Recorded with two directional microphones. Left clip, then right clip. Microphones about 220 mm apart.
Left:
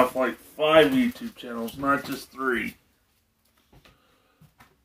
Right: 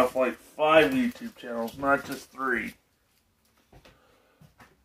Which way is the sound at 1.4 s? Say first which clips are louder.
Left 1 dB; 15° left (ahead or behind).